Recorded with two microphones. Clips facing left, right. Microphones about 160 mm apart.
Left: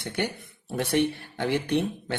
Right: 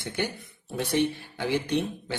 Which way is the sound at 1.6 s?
60° left (ahead or behind).